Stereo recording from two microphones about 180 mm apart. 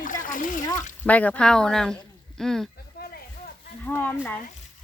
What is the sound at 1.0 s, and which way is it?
Speech, 10° left (ahead or behind).